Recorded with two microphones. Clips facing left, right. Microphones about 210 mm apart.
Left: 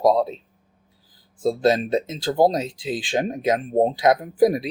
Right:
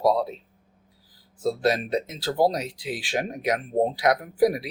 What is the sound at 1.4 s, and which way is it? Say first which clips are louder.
Speech: left 4 dB; 25° left (ahead or behind).